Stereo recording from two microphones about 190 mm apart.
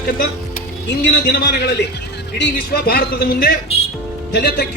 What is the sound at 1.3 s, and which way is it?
Speech, 55° left (ahead or behind).